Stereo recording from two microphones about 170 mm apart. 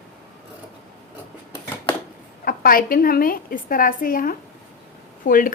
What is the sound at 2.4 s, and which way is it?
A woman's voice, 60° left (ahead or behind).